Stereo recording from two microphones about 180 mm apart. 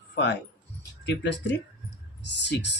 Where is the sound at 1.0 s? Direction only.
75° left (ahead or behind).